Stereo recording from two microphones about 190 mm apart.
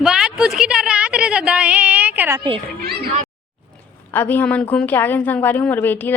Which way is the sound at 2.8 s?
55° right (ahead or behind).